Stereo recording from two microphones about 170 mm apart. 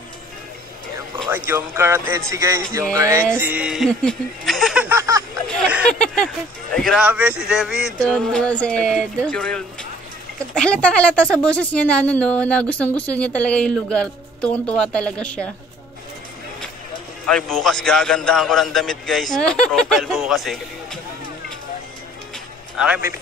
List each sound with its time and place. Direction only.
1.3 s speech: 10° right (ahead or behind)
5.9 s a man's voice: 5° left (ahead or behind)
7.1 s a man's voice: 10° right (ahead or behind); by 15.5 s 5° left (ahead or behind)
17.3 s a man's voice: 5° left (ahead or behind)
22.8 s speech: 10° right (ahead or behind)